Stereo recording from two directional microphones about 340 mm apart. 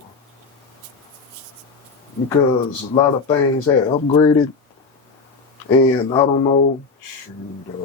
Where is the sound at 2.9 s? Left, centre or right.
Centre.